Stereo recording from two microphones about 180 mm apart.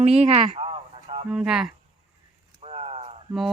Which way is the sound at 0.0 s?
35° right (ahead or behind).